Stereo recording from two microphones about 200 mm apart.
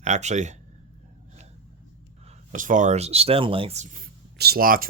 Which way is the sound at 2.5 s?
40° right (ahead or behind).